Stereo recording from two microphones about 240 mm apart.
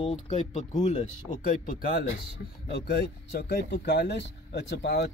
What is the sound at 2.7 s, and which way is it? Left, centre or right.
Speech, left.